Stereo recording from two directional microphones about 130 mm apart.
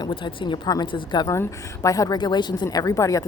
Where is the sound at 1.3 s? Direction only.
25° left (ahead or behind).